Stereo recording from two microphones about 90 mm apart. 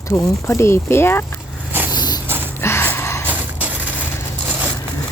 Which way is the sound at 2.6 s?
25° left (ahead or behind).